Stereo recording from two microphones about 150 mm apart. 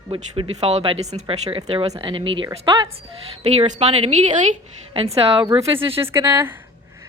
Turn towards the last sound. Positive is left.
turn(degrees=-15)  # may be behind; listen again after turning